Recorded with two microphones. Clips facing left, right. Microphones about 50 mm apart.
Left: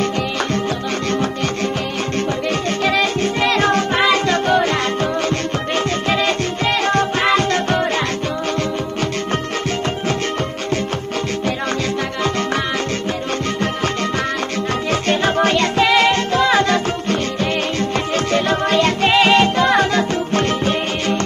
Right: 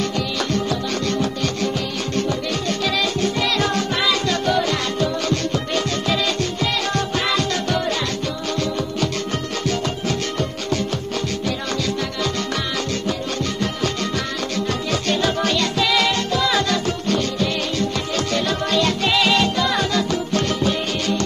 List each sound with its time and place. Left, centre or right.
1.1 s music: left
2.8 s music: left
14.9 s music: left